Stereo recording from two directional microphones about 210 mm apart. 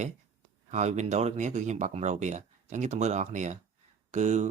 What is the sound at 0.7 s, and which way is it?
Speech, 35° right (ahead or behind).